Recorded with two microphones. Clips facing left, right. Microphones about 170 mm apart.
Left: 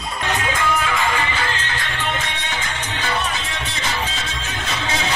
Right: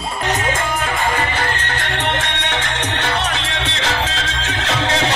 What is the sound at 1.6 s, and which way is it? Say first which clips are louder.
Music: right 4 dB; 75° right (ahead or behind).